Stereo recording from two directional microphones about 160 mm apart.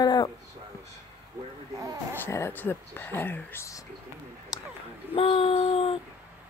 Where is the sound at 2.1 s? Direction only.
15° left (ahead or behind).